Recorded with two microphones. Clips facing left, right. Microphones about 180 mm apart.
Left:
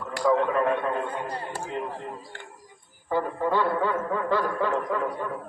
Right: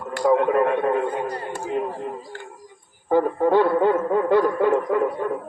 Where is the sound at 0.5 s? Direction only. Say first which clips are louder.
Right 5 dB; 55° right (ahead or behind).